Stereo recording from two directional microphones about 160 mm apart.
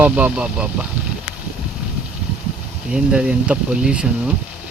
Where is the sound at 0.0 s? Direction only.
10° right (ahead or behind).